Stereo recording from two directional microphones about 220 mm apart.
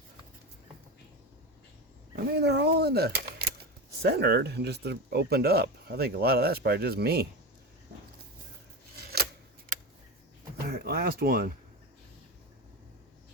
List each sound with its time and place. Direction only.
2.1 s speech: 50° right (ahead or behind)
9.0 s a sound: 45° right (ahead or behind)
10.7 s speech: 45° right (ahead or behind)